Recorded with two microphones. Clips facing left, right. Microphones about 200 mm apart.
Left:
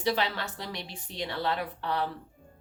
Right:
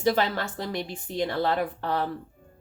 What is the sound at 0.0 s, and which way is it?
Speech, 50° right (ahead or behind).